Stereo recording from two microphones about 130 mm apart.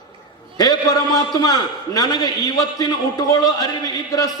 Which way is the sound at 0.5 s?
30° left (ahead or behind).